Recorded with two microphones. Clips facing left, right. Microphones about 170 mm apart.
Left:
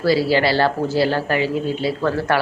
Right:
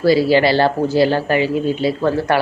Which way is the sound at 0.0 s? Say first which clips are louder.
Right 4 dB; 15° right (ahead or behind).